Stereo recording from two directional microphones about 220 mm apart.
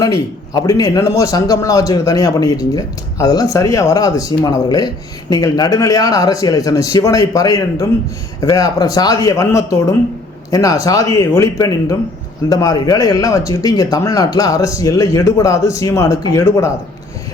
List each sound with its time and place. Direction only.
0.0 s a man's voice: 15° left (ahead or behind)